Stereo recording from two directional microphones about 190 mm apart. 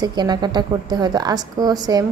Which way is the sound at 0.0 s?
20° right (ahead or behind).